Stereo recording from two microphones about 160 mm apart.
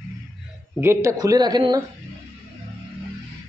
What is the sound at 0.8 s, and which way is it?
Speech, 15° right (ahead or behind).